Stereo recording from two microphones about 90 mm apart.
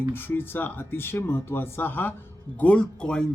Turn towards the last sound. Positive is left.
turn(degrees=10)  # may be behind; listen again after turning